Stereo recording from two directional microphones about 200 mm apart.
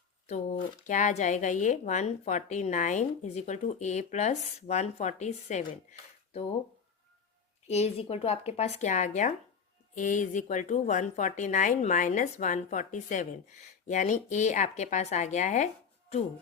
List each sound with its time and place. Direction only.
0.3 s speech: 40° left (ahead or behind)
7.7 s speech: 30° left (ahead or behind)